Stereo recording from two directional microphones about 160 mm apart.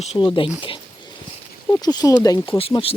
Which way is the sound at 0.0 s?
35° left (ahead or behind).